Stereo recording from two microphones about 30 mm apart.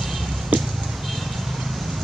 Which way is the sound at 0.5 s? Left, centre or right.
Right.